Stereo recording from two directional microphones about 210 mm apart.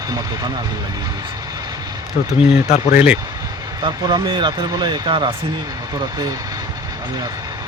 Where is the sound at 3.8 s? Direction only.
20° right (ahead or behind).